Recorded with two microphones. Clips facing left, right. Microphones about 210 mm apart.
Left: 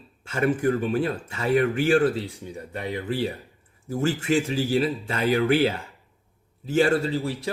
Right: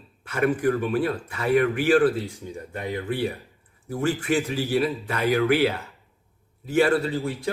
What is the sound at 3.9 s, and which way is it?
Speech, 25° left (ahead or behind).